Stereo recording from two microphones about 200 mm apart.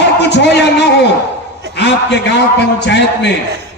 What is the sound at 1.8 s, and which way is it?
A man's voice, 60° left (ahead or behind).